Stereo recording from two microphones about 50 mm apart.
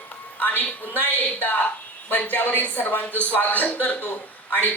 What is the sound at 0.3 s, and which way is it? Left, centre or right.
Speech, left.